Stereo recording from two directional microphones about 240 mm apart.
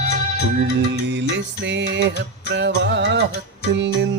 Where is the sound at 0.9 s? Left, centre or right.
Right.